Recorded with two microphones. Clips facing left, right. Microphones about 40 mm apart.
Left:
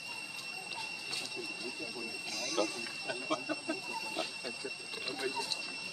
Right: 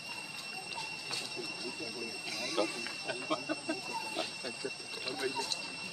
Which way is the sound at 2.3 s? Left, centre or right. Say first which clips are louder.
Even; centre.